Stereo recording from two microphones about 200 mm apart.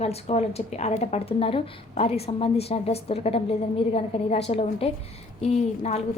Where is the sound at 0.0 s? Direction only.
30° left (ahead or behind).